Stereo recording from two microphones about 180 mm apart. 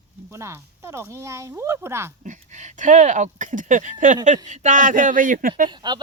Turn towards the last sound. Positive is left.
turn(degrees=-25)  # may be behind; listen again after turning